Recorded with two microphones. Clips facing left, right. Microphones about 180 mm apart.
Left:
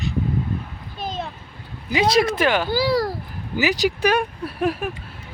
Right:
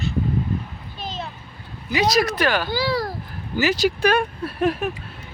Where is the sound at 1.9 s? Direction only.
25° left (ahead or behind).